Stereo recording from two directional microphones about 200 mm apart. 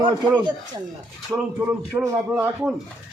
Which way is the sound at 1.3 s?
10° right (ahead or behind).